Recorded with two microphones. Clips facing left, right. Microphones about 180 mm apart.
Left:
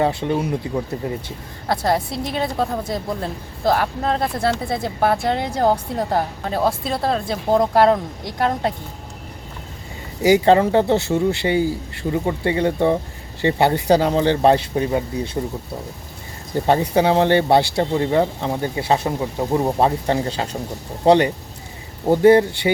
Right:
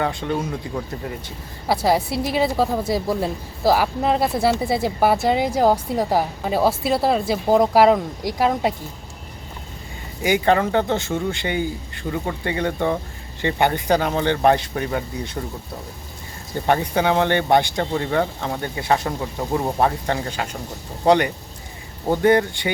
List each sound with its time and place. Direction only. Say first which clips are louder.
0.0 s speech: left 4 dB; 20° left (ahead or behind)
1.6 s a woman's voice: right 1 dB; 5° right (ahead or behind)
10.2 s speech: left 5 dB; 30° left (ahead or behind)
16.6 s speech: left 3 dB; 30° left (ahead or behind)